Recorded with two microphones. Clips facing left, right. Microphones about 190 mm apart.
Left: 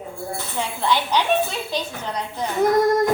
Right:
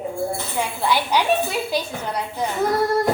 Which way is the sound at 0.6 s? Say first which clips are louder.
Even; 10° right (ahead or behind).